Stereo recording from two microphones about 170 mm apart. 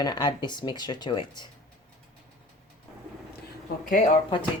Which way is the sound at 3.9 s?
50° left (ahead or behind).